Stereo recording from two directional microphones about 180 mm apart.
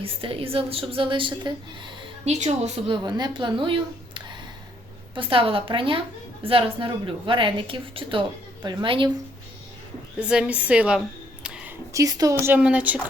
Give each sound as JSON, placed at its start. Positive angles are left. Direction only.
{"t": 0.0, "sound": "a woman's voice", "side_deg": -30}
{"t": 2.2, "sound": "a woman's voice", "side_deg": -40}
{"t": 10.2, "sound": "speech", "side_deg": -5}
{"t": 11.4, "sound": "a sound", "side_deg": -5}
{"t": 11.9, "sound": "speech", "side_deg": -20}